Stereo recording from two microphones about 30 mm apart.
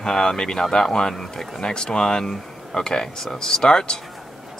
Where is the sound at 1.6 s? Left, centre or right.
Left.